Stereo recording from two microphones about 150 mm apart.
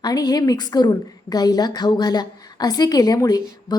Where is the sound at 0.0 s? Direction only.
25° left (ahead or behind).